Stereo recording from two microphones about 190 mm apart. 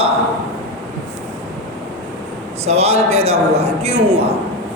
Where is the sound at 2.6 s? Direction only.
35° right (ahead or behind).